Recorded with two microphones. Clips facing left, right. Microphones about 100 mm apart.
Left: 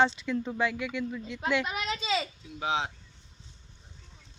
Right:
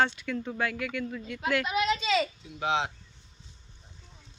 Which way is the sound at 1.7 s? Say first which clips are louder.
Right 4 dB; 30° left (ahead or behind).